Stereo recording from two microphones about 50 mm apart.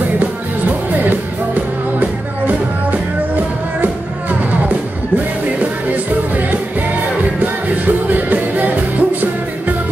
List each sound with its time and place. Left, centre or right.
1.0 s music: right
7.6 s music: right